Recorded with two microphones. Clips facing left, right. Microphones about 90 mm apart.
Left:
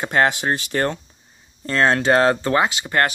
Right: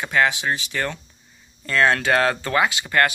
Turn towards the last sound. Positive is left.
turn(degrees=25)  # may be behind; listen again after turning